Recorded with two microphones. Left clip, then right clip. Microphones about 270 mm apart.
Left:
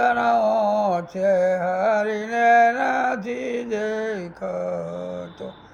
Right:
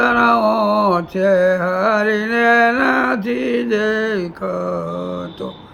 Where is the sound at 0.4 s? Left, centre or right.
Centre.